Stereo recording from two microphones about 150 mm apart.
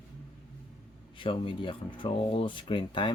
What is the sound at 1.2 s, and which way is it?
Speech, 35° left (ahead or behind).